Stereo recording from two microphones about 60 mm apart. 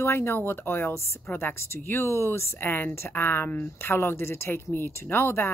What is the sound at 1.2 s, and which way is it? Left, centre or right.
Speech, left.